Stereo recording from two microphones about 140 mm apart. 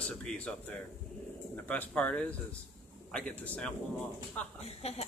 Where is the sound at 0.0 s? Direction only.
5° left (ahead or behind).